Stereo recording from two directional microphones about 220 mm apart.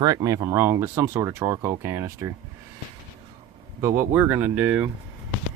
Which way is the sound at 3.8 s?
10° right (ahead or behind).